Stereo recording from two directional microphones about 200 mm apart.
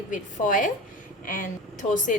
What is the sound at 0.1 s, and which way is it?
A woman's voice, 40° left (ahead or behind).